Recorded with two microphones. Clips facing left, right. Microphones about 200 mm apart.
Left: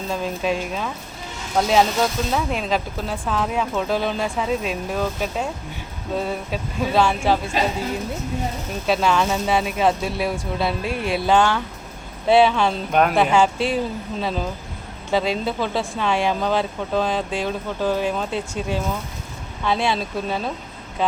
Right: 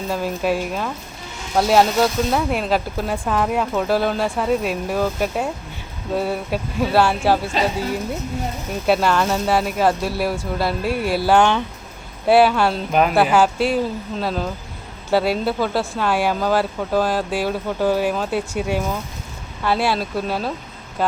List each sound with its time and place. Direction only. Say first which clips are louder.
0.1 s speech: right 2 dB; 5° right (ahead or behind)
8.9 s speech: right 2 dB; 5° right (ahead or behind)
11.3 s speech: right 3 dB; 20° right (ahead or behind)
12.3 s speech: right 1 dB; 5° right (ahead or behind)